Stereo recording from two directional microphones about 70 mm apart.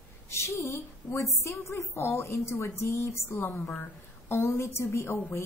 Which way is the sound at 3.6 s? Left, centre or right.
Centre.